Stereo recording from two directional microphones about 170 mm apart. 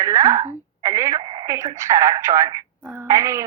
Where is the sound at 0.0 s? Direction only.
20° right (ahead or behind).